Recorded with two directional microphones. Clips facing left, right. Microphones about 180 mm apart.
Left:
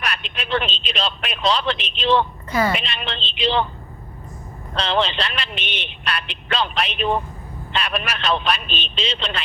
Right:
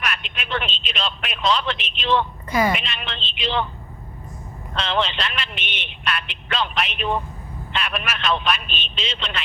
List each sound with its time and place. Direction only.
0.1 s a sound: 35° left (ahead or behind)
0.8 s speech: 35° left (ahead or behind)
2.5 s a woman's voice: 15° right (ahead or behind)
2.7 s speech: 35° left (ahead or behind)
4.8 s speech: 35° left (ahead or behind)